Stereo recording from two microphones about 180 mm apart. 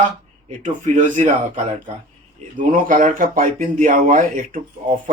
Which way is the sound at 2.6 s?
50° right (ahead or behind).